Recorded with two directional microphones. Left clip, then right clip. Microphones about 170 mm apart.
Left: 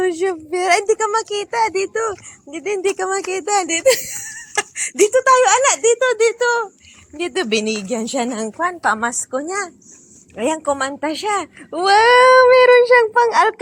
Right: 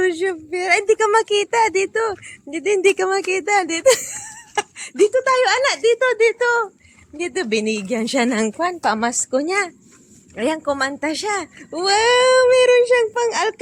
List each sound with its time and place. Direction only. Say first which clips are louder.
0.0 s a woman's voice: left 1 dB; 5° right (ahead or behind)
0.5 s speech: left 2 dB; 10° left (ahead or behind)
0.9 s speech: right 3 dB; 35° right (ahead or behind); by 4.4 s 15° right (ahead or behind)
4.5 s speech: left 1 dB; 5° right (ahead or behind)
7.2 s speech: left 2 dB; 5° left (ahead or behind)
8.1 s a woman's voice: right 3 dB; 25° right (ahead or behind)
9.5 s speech: right 3 dB; 20° right (ahead or behind)
10.3 s speech: left 1 dB; 5° right (ahead or behind)